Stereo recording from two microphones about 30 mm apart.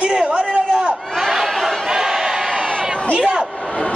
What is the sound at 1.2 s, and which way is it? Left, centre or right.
Crowd, centre.